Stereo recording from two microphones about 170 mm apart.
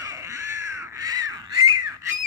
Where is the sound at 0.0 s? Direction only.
15° right (ahead or behind).